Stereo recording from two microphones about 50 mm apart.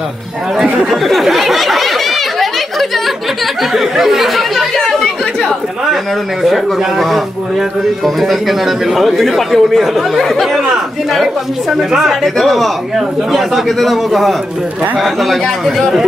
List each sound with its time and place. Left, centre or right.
0.8 s a man's voice: centre
3.9 s chatter: centre
6.4 s a man's voice: centre
11.7 s a man's voice: centre